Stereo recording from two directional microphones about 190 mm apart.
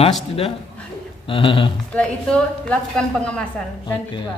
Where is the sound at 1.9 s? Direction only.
5° left (ahead or behind).